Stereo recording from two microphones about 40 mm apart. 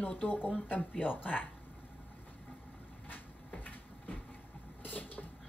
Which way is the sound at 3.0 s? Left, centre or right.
Left.